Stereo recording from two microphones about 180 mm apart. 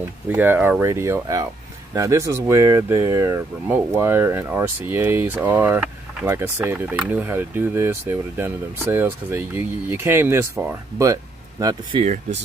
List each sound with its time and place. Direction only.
0.3 s speech: 10° right (ahead or behind)
12.0 s speech: 40° right (ahead or behind)